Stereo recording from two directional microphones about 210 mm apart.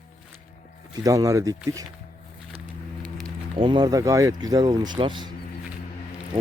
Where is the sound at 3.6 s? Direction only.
20° right (ahead or behind).